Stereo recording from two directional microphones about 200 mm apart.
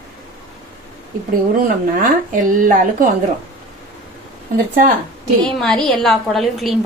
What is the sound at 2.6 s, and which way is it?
Speech, 45° right (ahead or behind).